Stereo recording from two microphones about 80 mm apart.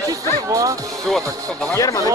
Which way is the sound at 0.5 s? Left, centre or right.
Right.